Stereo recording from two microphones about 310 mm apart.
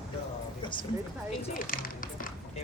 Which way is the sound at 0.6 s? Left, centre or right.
Centre.